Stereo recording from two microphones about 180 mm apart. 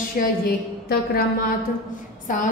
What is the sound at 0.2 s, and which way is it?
Speech, 50° left (ahead or behind).